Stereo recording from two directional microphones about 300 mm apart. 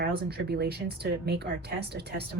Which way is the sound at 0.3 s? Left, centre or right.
Right.